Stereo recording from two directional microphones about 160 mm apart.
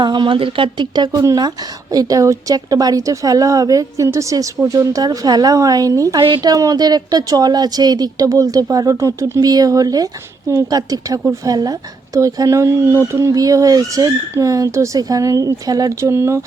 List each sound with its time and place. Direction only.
0.0 s speech: 30° right (ahead or behind)